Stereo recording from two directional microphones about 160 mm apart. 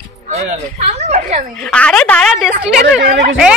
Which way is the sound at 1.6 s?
5° left (ahead or behind).